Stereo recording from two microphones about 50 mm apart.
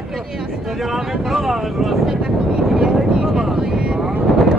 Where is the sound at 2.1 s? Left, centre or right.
Centre.